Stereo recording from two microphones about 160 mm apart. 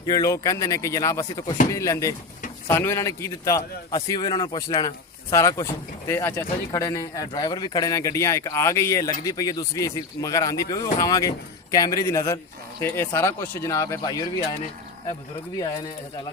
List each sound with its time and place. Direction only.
0.0 s speech: 20° left (ahead or behind)
15.5 s speech: 25° left (ahead or behind)